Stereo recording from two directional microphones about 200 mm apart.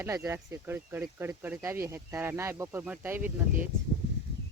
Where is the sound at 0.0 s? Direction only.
15° right (ahead or behind).